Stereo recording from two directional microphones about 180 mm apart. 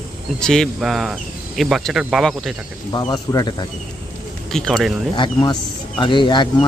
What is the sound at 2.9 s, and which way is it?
Speech, 25° left (ahead or behind).